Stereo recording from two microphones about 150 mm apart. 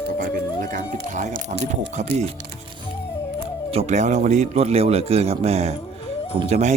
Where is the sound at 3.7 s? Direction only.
45° right (ahead or behind).